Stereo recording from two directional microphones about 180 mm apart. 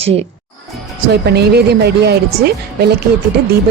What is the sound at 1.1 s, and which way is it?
Speech, 65° right (ahead or behind).